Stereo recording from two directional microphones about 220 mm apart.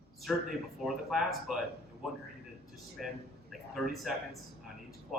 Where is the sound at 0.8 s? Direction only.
Centre (ahead or behind).